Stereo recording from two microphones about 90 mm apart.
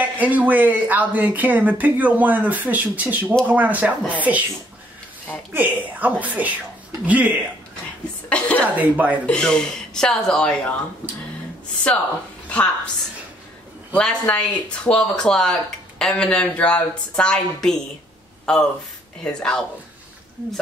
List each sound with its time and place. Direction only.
0.0 s speech: 20° right (ahead or behind)
5.5 s speech: 20° right (ahead or behind)
8.3 s a sound: 15° left (ahead or behind)
8.7 s speech: 15° right (ahead or behind)
9.2 s a woman's voice: 10° left (ahead or behind)
12.4 s a woman's voice: 15° left (ahead or behind)
13.9 s a woman's voice: 15° left (ahead or behind)
18.4 s a sound: 10° left (ahead or behind)
19.2 s a woman's voice: 5° left (ahead or behind)